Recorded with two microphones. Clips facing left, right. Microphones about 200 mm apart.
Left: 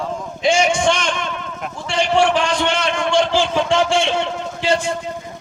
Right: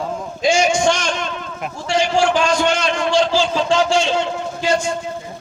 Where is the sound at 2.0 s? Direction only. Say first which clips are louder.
Even; 60° left (ahead or behind).